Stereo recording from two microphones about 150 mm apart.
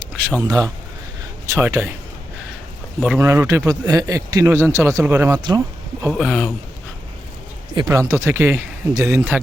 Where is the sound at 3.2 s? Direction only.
20° right (ahead or behind).